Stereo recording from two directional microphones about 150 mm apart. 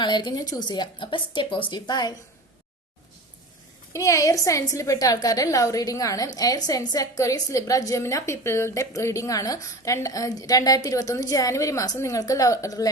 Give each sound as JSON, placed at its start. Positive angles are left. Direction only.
{"t": 0.0, "sound": "a woman's voice", "side_deg": 30}
{"t": 3.9, "sound": "a woman's voice", "side_deg": 20}